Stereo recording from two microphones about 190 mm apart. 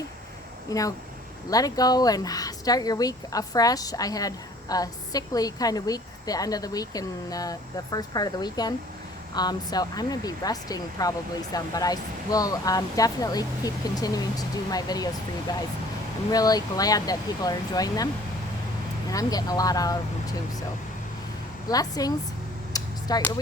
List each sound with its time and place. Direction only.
0.7 s speech: 20° left (ahead or behind)
19.1 s speech: 20° left (ahead or behind)
21.7 s speech: 20° left (ahead or behind)
22.7 s a sound: 20° left (ahead or behind)